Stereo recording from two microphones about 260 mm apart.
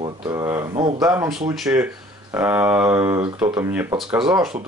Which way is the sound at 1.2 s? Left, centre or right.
Centre.